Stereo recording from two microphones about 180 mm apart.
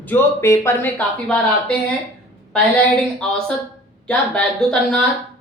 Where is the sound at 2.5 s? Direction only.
5° left (ahead or behind).